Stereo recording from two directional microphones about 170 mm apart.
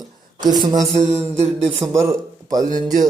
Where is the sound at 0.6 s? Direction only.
20° right (ahead or behind).